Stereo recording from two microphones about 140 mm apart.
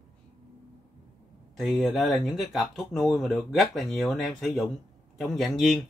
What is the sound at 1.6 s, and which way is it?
Speech, centre (ahead or behind).